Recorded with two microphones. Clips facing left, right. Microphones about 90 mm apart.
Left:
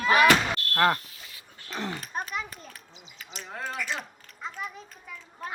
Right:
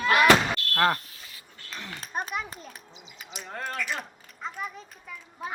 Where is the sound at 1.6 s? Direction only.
45° left (ahead or behind).